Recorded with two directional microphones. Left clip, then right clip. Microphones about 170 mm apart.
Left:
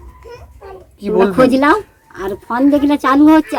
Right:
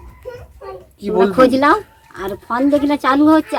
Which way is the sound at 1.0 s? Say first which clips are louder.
Left 2 dB; 40° left (ahead or behind).